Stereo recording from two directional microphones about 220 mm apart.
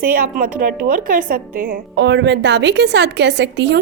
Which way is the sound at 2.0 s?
55° right (ahead or behind).